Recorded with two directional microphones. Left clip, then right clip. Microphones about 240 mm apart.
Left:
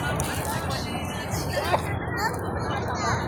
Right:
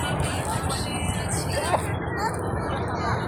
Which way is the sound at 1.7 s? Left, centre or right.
Left.